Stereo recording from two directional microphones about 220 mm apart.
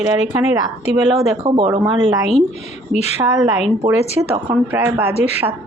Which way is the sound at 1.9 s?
30° left (ahead or behind).